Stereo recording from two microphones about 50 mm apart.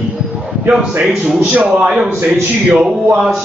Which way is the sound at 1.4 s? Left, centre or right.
Right.